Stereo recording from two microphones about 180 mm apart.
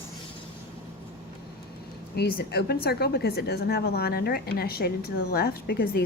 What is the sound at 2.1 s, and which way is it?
A woman's voice, 65° left (ahead or behind).